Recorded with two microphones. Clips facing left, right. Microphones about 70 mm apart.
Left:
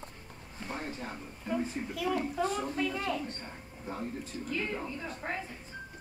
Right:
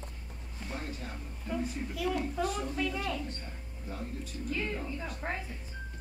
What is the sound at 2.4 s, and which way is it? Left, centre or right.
Speech, left.